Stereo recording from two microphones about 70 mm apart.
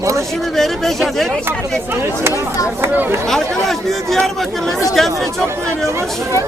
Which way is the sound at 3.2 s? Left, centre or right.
Centre.